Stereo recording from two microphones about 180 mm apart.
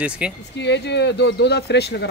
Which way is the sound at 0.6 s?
70° left (ahead or behind).